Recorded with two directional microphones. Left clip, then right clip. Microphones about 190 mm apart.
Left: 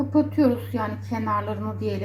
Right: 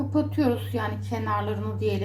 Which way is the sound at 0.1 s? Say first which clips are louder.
Left 4 dB; 15° left (ahead or behind).